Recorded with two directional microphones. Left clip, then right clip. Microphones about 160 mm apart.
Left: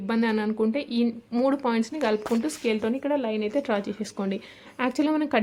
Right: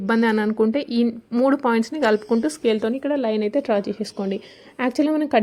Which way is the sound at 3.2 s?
35° right (ahead or behind).